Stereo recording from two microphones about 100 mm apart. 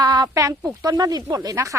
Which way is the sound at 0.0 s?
40° right (ahead or behind).